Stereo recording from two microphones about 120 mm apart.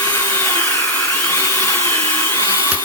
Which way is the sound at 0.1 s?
20° left (ahead or behind).